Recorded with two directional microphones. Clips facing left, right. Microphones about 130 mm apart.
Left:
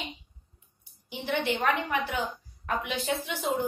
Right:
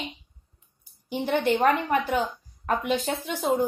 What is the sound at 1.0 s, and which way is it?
A woman's voice, 45° right (ahead or behind).